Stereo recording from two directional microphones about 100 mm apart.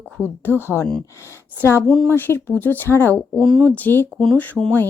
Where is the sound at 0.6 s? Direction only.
25° left (ahead or behind).